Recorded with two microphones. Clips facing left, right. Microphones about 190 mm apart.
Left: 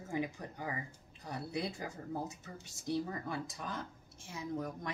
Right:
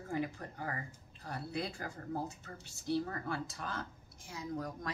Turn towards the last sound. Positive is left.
turn(degrees=20)  # may be behind; listen again after turning